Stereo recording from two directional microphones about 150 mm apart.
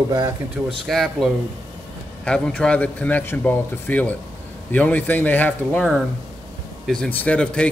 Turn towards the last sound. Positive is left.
turn(degrees=5)  # may be behind; listen again after turning